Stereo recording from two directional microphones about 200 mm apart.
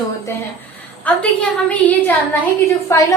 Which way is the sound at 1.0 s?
5° left (ahead or behind).